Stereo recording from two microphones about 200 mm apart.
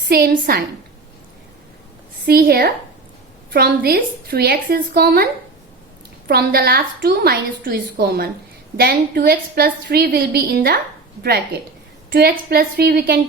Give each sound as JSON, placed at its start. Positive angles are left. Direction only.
{"t": 0.1, "sound": "a woman's voice", "side_deg": -50}
{"t": 2.2, "sound": "a woman's voice", "side_deg": -50}